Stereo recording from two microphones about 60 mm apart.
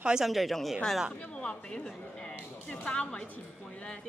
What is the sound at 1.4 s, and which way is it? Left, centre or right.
Speech, centre.